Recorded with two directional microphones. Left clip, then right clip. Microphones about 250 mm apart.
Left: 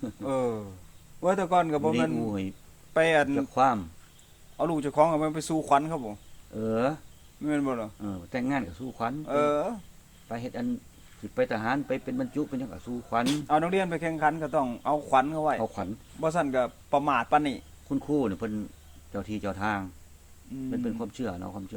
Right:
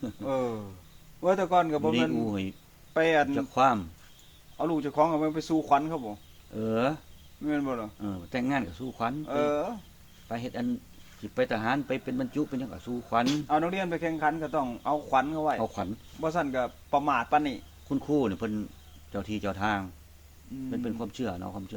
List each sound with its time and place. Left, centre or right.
0.3 s a man's voice: left
2.1 s a man's voice: centre
2.9 s a man's voice: left
3.3 s a man's voice: centre
4.5 s a man's voice: left
6.5 s a man's voice: centre
7.4 s a man's voice: left
8.0 s a man's voice: centre
9.2 s a man's voice: left
10.2 s a man's voice: centre
13.2 s a man's voice: left
15.6 s a man's voice: centre
16.2 s a man's voice: left
17.8 s a man's voice: centre